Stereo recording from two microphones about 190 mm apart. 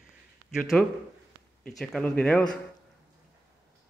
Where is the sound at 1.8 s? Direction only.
5° left (ahead or behind).